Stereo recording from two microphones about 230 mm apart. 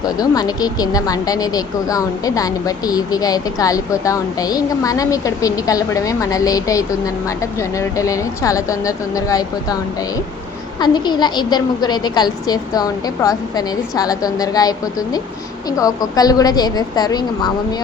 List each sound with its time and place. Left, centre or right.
0.0 s speech: centre
10.8 s speech: centre